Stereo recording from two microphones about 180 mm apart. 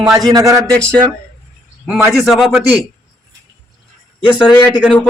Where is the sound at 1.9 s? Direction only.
5° right (ahead or behind).